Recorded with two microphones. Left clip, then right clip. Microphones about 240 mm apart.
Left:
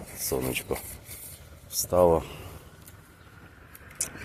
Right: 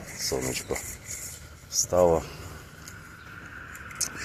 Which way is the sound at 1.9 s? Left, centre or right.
Centre.